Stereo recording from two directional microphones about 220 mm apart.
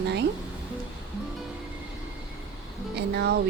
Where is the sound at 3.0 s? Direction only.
50° right (ahead or behind).